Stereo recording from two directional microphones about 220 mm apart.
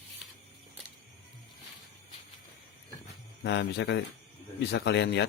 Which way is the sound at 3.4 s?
50° left (ahead or behind).